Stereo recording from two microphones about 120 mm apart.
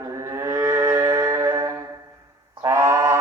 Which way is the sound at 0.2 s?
25° right (ahead or behind).